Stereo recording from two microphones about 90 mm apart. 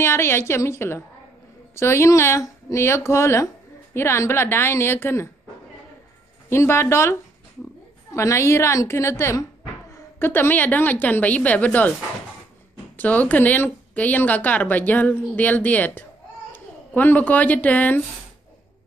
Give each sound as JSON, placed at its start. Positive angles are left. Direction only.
{"t": 0.0, "sound": "a woman's voice", "side_deg": 25}
{"t": 6.5, "sound": "a woman's voice", "side_deg": 30}
{"t": 12.9, "sound": "a woman's voice", "side_deg": 20}